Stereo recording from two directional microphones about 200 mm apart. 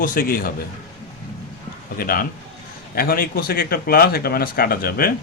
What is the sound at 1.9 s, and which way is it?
Speech, 45° left (ahead or behind).